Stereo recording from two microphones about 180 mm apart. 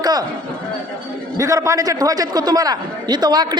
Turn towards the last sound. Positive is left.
turn(degrees=-25)  # may be behind; listen again after turning